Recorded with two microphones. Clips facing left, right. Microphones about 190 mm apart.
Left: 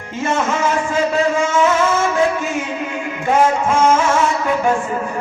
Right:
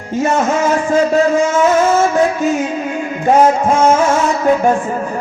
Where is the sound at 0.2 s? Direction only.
40° right (ahead or behind).